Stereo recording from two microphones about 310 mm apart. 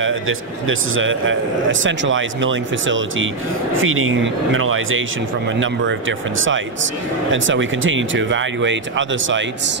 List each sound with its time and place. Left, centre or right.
0.0 s a man's voice: right